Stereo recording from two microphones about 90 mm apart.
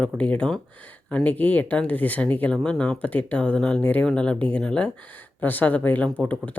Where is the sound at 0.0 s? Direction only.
15° left (ahead or behind).